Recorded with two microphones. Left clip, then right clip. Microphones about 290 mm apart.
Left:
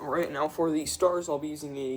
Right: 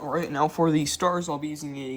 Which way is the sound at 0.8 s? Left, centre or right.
Right.